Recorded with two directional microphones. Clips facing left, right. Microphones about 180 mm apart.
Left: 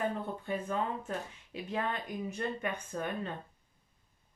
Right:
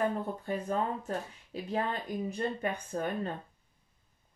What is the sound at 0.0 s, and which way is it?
Speech, 40° right (ahead or behind).